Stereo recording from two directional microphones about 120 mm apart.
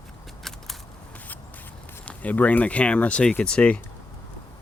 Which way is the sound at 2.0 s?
15° left (ahead or behind).